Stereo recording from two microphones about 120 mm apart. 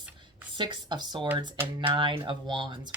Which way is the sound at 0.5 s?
40° right (ahead or behind).